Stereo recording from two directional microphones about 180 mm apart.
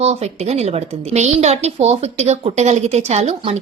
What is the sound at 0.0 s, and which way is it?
A woman's voice, 35° right (ahead or behind).